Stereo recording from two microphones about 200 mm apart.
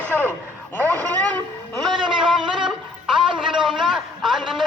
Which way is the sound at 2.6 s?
Centre (ahead or behind).